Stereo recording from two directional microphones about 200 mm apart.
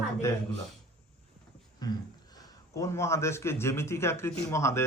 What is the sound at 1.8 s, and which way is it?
A man's voice, 20° left (ahead or behind).